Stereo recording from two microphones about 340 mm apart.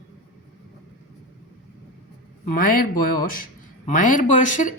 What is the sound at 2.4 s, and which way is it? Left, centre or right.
Speech, left.